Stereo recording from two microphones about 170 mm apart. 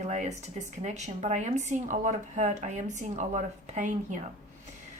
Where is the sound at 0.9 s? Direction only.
40° right (ahead or behind).